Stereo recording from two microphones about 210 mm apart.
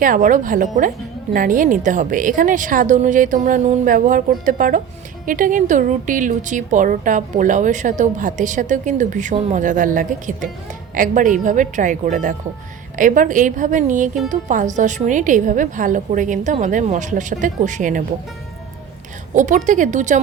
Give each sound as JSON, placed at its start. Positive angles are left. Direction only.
{"t": 0.0, "sound": "a woman's voice", "side_deg": -40}
{"t": 19.3, "sound": "a woman's voice", "side_deg": -35}